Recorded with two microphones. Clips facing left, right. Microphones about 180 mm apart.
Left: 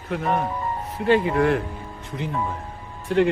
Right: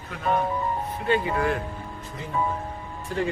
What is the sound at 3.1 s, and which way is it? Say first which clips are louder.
Speech: left 8 dB; 75° left (ahead or behind).